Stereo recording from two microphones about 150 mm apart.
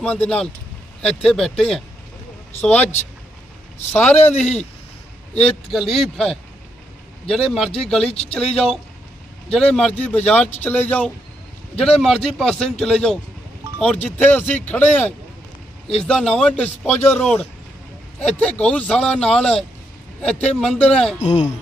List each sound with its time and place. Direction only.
0.0 s speech: 10° left (ahead or behind)
3.9 s speech: 10° left (ahead or behind)
5.7 s speech: centre (ahead or behind)
8.1 s speech: 40° left (ahead or behind)
8.4 s speech: 5° left (ahead or behind)
21.2 s speech: 50° left (ahead or behind)